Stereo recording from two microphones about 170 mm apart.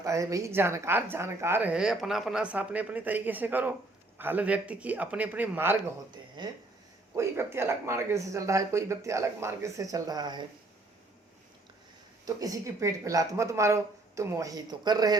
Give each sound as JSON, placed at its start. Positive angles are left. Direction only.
{"t": 0.0, "sound": "a woman's voice", "side_deg": -20}
{"t": 6.4, "sound": "speech", "side_deg": -25}
{"t": 7.1, "sound": "a woman's voice", "side_deg": -15}
{"t": 12.2, "sound": "a woman's voice", "side_deg": -20}